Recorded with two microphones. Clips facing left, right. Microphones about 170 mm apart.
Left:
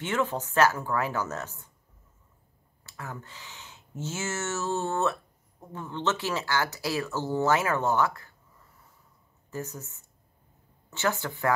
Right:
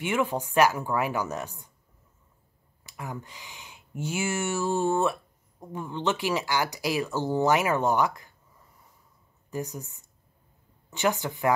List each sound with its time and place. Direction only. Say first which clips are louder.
0.0 s speech: right 2 dB; 10° right (ahead or behind)
2.8 s speech: right 3 dB; 15° right (ahead or behind)
9.5 s speech: right 3 dB; 15° right (ahead or behind)